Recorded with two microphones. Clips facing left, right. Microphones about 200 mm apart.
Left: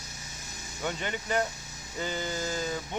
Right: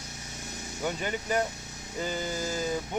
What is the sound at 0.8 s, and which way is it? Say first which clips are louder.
Speech: right 2 dB; 10° right (ahead or behind).